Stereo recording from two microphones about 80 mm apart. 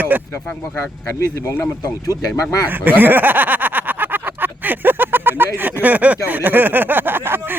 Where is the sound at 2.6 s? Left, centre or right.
Right.